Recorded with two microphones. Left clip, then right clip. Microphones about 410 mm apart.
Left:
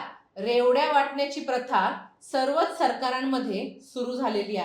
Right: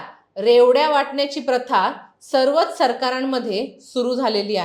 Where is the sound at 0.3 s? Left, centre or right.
Right.